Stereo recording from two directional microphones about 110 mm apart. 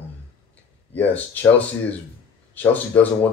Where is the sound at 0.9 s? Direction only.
15° left (ahead or behind).